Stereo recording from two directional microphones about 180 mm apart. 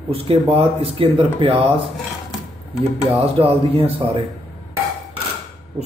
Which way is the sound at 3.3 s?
30° right (ahead or behind).